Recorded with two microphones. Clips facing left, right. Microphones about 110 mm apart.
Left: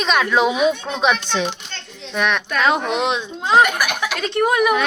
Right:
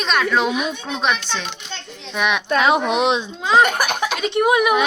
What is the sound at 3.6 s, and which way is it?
Speech, 30° right (ahead or behind).